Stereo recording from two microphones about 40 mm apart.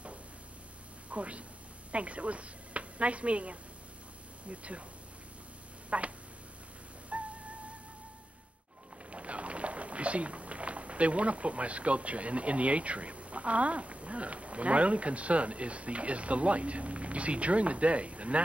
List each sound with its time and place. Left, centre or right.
1.1 s speech: right
5.9 s a sound: right
7.1 s music: right
9.1 s speech: right